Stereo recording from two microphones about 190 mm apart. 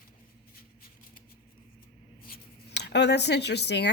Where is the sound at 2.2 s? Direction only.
55° left (ahead or behind).